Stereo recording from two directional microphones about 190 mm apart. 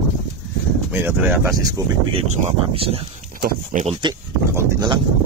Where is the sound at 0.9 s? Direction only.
10° right (ahead or behind).